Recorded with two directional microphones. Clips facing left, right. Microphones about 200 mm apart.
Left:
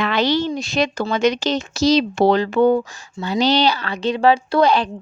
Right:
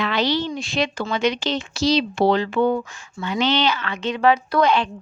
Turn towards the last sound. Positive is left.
turn(degrees=35)  # may be behind; listen again after turning